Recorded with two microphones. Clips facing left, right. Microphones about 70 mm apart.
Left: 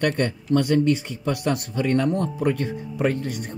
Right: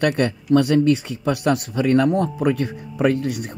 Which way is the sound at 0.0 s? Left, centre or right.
Right.